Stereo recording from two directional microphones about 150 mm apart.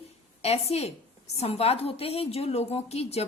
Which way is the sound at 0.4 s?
45° left (ahead or behind).